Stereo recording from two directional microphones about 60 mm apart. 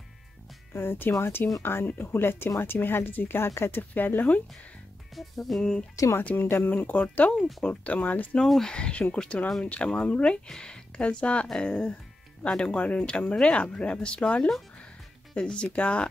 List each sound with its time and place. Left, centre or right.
0.7 s speech: left
3.9 s speech: left
5.1 s music: centre
5.6 s speech: centre
6.2 s speech: left
8.4 s speech: centre
8.7 s speech: centre